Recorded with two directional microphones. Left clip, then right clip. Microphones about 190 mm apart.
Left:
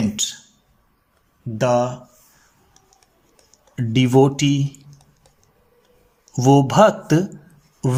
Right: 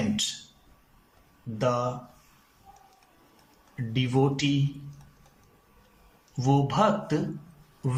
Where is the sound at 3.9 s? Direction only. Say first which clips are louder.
Left 11 dB; 70° left (ahead or behind).